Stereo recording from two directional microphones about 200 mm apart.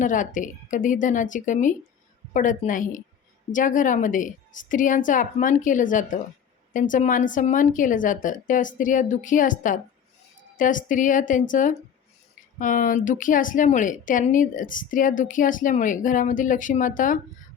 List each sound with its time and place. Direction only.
0.0 s a woman's voice: 40° left (ahead or behind)